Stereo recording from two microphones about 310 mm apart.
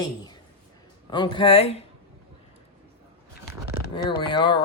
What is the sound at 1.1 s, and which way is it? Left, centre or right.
Speech, centre.